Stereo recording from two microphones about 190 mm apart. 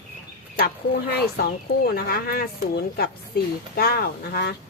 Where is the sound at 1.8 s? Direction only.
50° left (ahead or behind).